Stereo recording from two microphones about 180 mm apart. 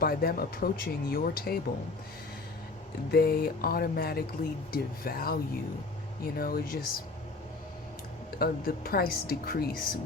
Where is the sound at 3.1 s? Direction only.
60° left (ahead or behind).